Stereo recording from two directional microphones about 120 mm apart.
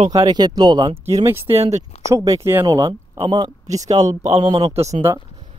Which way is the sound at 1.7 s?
25° right (ahead or behind).